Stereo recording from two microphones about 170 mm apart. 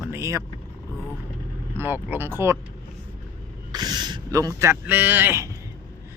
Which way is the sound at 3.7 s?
25° right (ahead or behind).